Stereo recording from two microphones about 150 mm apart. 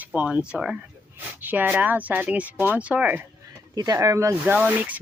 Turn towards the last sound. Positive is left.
turn(degrees=-10)  # may be behind; listen again after turning